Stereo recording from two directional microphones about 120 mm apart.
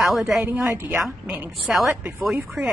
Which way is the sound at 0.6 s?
15° right (ahead or behind).